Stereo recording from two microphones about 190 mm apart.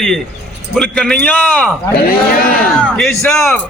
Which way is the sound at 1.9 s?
50° left (ahead or behind).